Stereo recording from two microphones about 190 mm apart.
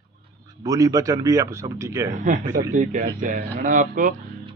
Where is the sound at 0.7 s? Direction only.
15° right (ahead or behind).